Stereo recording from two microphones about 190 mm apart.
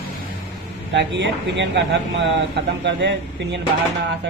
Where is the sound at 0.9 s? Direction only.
70° right (ahead or behind).